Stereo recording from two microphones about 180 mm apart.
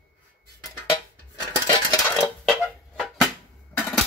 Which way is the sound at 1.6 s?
30° left (ahead or behind).